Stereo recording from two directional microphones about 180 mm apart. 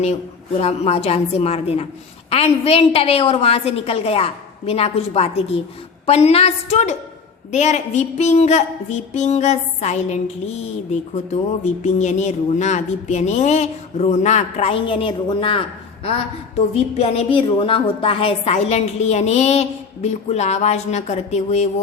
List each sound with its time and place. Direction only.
0.6 s a woman's voice: 35° left (ahead or behind)